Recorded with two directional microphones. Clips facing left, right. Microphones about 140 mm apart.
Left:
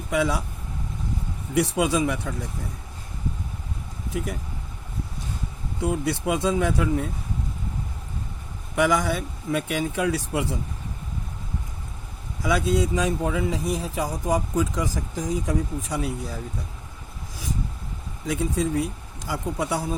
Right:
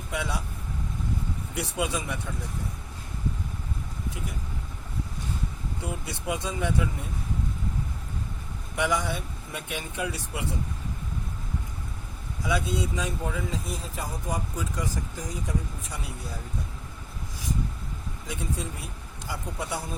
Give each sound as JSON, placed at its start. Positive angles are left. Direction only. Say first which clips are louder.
{"t": 0.1, "sound": "speech", "louder": "left 8 dB", "side_deg": 90}
{"t": 1.5, "sound": "speech", "louder": "left 9 dB", "side_deg": 90}
{"t": 5.8, "sound": "speech", "louder": "left 11 dB", "side_deg": 90}
{"t": 8.7, "sound": "speech", "louder": "left 6 dB", "side_deg": 90}
{"t": 12.4, "sound": "speech", "louder": "left 6 dB", "side_deg": 90}
{"t": 18.3, "sound": "speech", "louder": "left 10 dB", "side_deg": 90}